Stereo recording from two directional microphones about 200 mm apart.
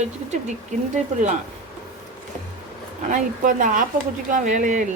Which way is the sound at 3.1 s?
40° right (ahead or behind).